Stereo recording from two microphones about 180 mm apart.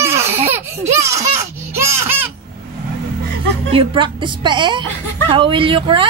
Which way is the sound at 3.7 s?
30° right (ahead or behind).